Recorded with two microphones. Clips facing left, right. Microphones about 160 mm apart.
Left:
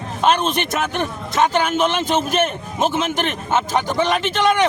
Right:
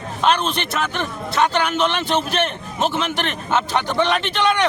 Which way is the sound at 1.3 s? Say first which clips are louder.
Left 2 dB; 45° left (ahead or behind).